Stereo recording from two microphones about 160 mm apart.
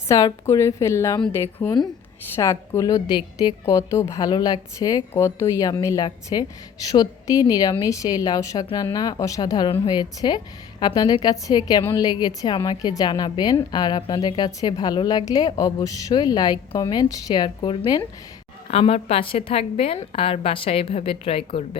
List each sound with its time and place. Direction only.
0.1 s a woman's voice: 20° left (ahead or behind)
18.7 s a woman's voice: 40° left (ahead or behind)